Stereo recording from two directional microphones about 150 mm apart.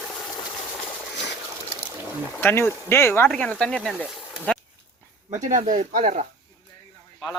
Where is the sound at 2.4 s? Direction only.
15° left (ahead or behind).